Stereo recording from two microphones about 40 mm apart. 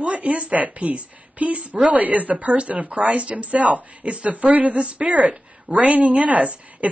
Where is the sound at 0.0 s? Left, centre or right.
Right.